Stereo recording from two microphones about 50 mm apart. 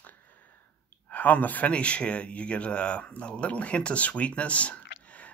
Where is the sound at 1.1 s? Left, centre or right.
Left.